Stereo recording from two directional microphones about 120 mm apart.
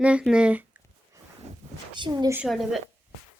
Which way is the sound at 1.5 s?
70° right (ahead or behind).